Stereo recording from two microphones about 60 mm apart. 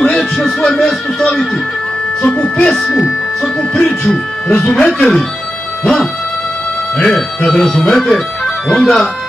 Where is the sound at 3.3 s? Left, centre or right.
Centre.